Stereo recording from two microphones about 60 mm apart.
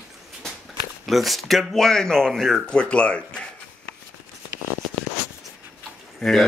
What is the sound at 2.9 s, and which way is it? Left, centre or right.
Speech, centre.